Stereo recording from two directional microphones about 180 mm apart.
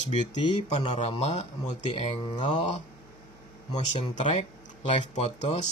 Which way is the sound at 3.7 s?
40° left (ahead or behind).